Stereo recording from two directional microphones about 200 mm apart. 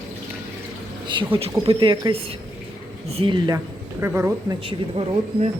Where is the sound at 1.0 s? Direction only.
25° right (ahead or behind).